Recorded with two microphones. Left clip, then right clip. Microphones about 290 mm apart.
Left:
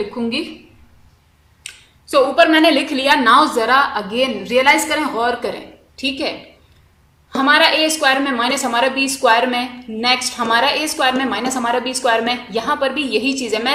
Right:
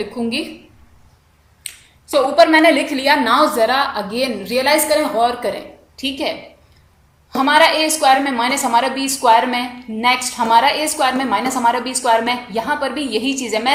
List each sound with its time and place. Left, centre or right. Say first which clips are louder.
2.1 s a woman's voice: right 1 dB; left
7.3 s a woman's voice: even; left